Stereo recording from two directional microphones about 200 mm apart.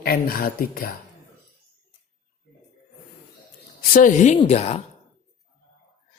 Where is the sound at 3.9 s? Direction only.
40° left (ahead or behind).